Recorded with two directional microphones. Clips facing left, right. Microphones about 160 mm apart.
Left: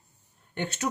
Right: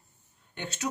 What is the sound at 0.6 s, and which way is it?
Speech, 55° left (ahead or behind).